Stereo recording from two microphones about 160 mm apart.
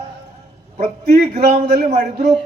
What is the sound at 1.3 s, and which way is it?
Speech, 45° right (ahead or behind).